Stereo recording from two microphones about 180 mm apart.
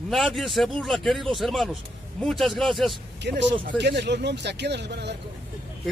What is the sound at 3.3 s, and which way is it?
Speech, 70° right (ahead or behind).